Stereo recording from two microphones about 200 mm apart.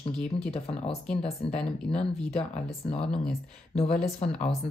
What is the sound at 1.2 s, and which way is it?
Speech, 30° left (ahead or behind).